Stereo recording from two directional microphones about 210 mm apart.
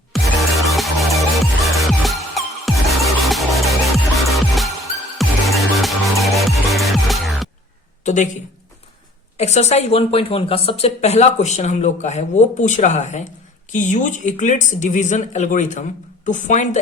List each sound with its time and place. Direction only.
0.1 s music: centre (ahead or behind)
8.0 s a man's voice: 35° left (ahead or behind)
9.4 s a woman's voice: 30° left (ahead or behind)